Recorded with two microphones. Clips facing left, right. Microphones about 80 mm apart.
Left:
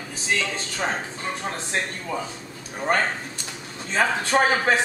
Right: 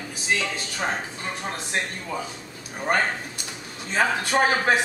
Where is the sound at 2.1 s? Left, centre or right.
Centre.